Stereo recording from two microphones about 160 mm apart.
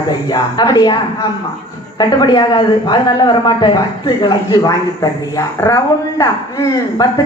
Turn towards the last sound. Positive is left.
turn(degrees=20)  # may be behind; listen again after turning